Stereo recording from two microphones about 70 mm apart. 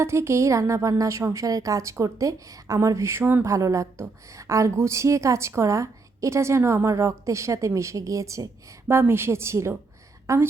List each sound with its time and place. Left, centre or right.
0.0 s a woman's voice: right
3.4 s a woman's voice: right
8.9 s a woman's voice: right